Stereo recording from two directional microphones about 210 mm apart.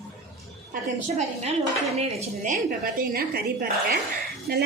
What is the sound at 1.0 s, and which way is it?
A woman's voice, 30° right (ahead or behind).